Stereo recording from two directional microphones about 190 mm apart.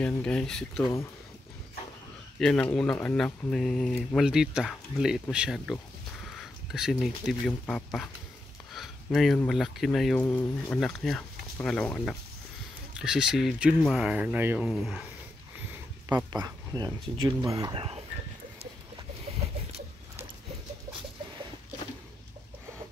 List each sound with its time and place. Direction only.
0.0 s speech: 5° left (ahead or behind)
2.3 s speech: 5° left (ahead or behind)
16.3 s speech: 20° right (ahead or behind)